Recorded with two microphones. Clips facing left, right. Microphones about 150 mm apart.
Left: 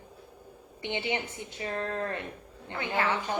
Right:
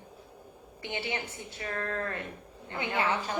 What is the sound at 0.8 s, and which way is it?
A woman's voice, 20° left (ahead or behind).